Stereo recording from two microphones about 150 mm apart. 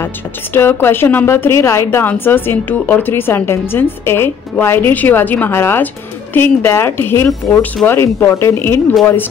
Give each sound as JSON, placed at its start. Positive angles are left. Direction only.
{"t": 0.0, "sound": "a woman's voice", "side_deg": 15}